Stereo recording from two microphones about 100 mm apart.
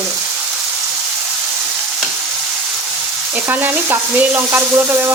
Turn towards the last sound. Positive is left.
turn(degrees=-25)  # may be behind; listen again after turning